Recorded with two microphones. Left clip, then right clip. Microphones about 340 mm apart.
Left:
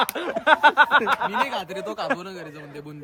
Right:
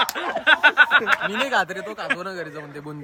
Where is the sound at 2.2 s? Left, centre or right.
Centre.